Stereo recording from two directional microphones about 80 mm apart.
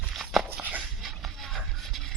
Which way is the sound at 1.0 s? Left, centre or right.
Centre.